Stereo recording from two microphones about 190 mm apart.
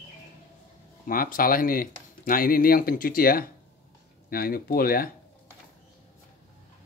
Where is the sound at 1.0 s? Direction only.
45° left (ahead or behind).